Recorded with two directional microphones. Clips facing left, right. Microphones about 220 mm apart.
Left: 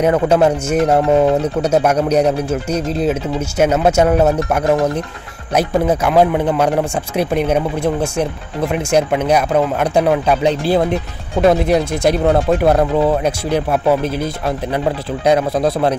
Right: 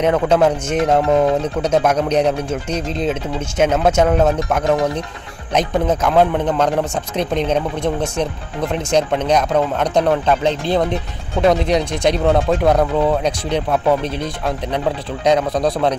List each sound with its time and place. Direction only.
0.0 s speech: 10° left (ahead or behind)